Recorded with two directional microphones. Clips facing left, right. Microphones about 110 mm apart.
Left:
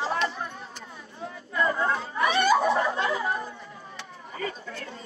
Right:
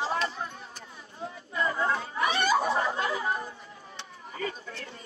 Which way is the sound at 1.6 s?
35° left (ahead or behind).